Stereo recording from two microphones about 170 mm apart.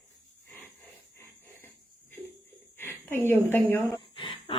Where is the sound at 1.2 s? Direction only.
15° left (ahead or behind).